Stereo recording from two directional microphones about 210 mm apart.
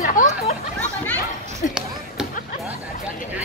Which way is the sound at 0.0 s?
40° left (ahead or behind).